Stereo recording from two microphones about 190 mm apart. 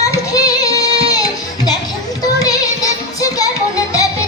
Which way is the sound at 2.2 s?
20° left (ahead or behind).